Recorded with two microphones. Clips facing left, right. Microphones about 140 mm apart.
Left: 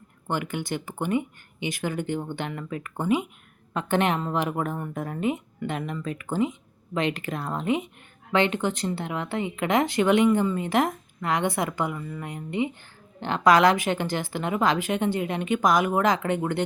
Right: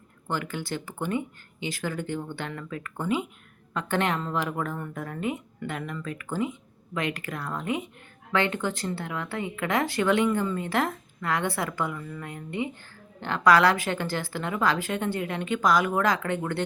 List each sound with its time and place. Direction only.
0.3 s a woman's voice: 20° left (ahead or behind)